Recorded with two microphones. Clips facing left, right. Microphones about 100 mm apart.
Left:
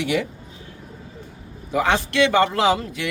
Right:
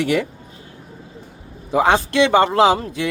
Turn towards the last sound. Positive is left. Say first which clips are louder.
# right 5 dB
turn(degrees=-30)  # may be behind; listen again after turning